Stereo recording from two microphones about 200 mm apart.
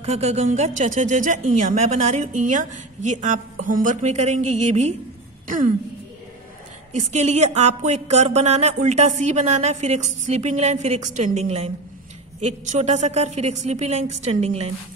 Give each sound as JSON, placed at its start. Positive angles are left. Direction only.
{"t": 0.0, "sound": "speech", "side_deg": -30}
{"t": 6.9, "sound": "speech", "side_deg": -35}